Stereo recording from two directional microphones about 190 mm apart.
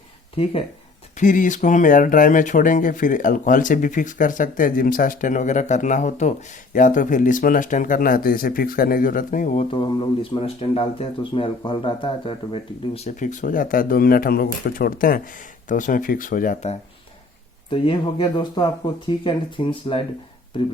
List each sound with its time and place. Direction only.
1.1 s speech: 40° left (ahead or behind)
9.7 s speech: 25° left (ahead or behind)
13.1 s speech: 45° left (ahead or behind)
17.7 s speech: 30° left (ahead or behind)